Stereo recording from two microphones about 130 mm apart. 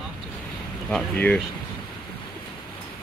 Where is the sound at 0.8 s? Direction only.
10° left (ahead or behind).